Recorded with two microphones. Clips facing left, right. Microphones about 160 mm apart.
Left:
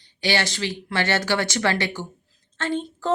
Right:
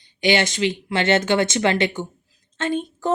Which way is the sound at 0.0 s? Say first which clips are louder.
Right 5 dB; 20° right (ahead or behind).